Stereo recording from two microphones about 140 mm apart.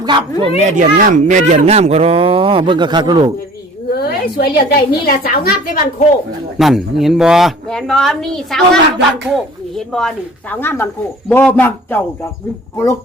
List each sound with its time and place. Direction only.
0.0 s speech: 35° right (ahead or behind)
0.6 s speech: 65° right (ahead or behind); by 3.3 s 30° right (ahead or behind)
3.9 s a woman's voice: 90° left
6.6 s a woman's voice: centre (ahead or behind)
10.6 s a man's voice: 15° left (ahead or behind)